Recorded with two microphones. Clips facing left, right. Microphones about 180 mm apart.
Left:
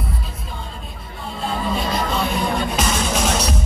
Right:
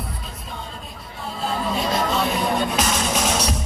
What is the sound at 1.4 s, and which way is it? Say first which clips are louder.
Music: left 1 dB; centre (ahead or behind).